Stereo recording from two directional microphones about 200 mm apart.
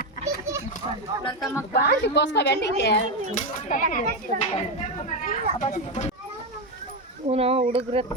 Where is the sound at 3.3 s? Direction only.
40° left (ahead or behind).